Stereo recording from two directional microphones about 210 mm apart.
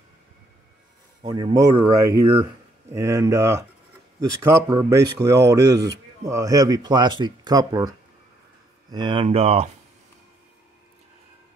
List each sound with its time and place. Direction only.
1.3 s speech: 15° right (ahead or behind)
8.9 s speech: 25° right (ahead or behind)